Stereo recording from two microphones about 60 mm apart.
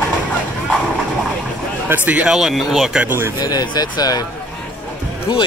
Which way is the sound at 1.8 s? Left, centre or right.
Right.